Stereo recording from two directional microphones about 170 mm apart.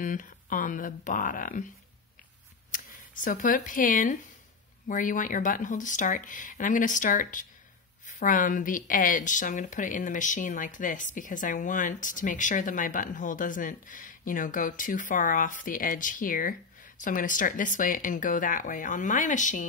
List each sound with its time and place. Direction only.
0.0 s speech: 50° left (ahead or behind)
2.7 s speech: 50° left (ahead or behind)